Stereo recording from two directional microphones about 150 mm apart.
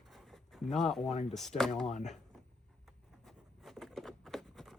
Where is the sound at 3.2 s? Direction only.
Centre (ahead or behind).